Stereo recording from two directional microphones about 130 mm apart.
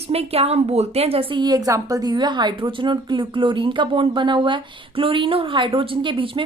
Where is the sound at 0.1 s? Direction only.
50° right (ahead or behind).